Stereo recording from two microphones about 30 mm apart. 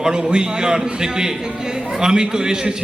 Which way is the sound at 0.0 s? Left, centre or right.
Right.